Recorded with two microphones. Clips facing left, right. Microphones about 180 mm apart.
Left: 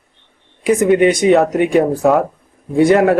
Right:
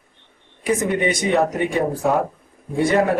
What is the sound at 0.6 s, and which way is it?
Speech, 90° left.